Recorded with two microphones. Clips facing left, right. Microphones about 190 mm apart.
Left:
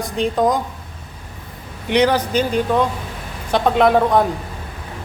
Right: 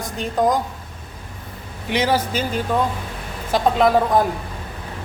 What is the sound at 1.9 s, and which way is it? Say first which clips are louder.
Speech: left 4 dB; 5° right (ahead or behind).